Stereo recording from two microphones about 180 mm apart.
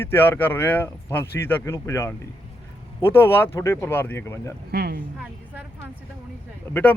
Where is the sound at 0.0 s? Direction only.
10° left (ahead or behind).